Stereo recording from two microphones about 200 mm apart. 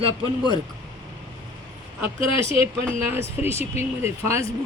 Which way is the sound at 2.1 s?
30° left (ahead or behind).